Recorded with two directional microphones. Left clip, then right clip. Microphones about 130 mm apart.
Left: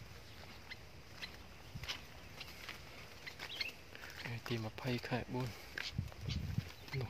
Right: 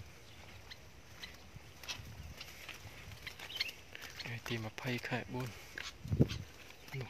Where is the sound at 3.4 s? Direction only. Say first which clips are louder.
Right 3 dB; 5° left (ahead or behind).